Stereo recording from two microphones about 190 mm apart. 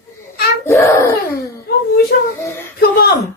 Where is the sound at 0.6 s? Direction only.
15° left (ahead or behind).